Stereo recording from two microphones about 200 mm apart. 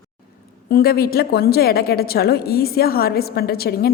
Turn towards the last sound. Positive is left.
turn(degrees=50)  # may be behind; listen again after turning